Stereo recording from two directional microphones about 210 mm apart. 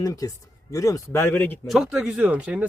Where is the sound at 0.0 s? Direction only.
15° left (ahead or behind); by 2.6 s 5° right (ahead or behind).